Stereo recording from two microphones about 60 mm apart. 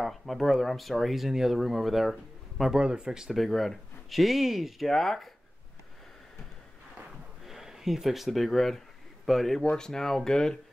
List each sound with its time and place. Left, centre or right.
0.0 s speech: centre
2.8 s speech: centre
3.4 s speech: centre
7.4 s speech: centre